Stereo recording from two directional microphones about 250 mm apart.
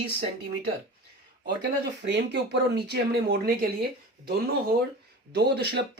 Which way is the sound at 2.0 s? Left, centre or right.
Right.